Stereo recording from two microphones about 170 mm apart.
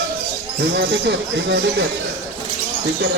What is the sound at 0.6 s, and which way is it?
Speech, 80° right.